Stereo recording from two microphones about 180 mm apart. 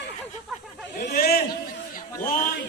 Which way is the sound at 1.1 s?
60° left (ahead or behind).